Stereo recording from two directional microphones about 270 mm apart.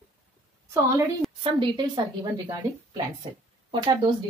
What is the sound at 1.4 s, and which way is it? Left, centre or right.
A woman's voice, centre.